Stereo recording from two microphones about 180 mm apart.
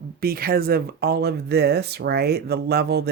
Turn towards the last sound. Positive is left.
turn(degrees=-65)  # may be behind; listen again after turning